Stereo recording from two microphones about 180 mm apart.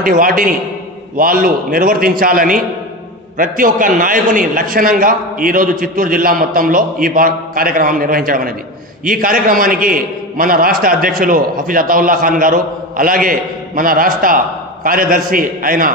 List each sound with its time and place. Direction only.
0.0 s a man's voice: 50° right (ahead or behind)